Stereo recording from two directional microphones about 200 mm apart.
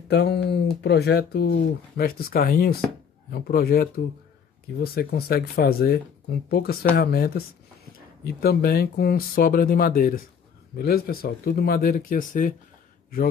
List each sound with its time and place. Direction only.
0.1 s speech: 55° left (ahead or behind); by 12.5 s 40° left (ahead or behind)